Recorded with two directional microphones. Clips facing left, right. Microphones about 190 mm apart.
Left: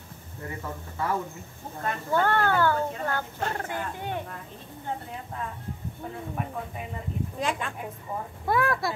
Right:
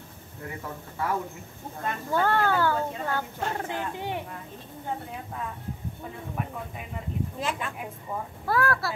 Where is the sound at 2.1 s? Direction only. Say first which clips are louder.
Even; 10° right (ahead or behind).